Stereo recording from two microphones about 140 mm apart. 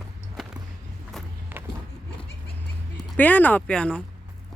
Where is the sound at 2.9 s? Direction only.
10° left (ahead or behind).